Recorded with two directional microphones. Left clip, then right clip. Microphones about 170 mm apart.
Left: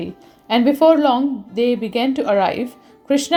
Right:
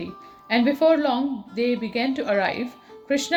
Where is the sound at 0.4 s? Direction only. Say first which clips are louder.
Left 6 dB; 35° left (ahead or behind).